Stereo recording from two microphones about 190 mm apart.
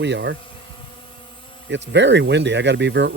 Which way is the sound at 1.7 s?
70° right (ahead or behind).